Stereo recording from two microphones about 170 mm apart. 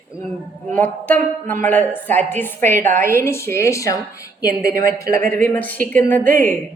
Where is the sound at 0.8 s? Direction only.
10° left (ahead or behind).